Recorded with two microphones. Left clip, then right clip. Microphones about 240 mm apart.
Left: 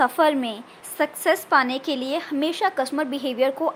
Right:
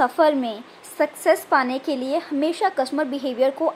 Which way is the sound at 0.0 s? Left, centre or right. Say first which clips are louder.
Right 1 dB; centre.